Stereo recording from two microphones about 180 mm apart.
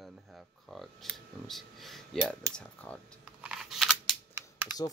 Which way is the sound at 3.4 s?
5° right (ahead or behind).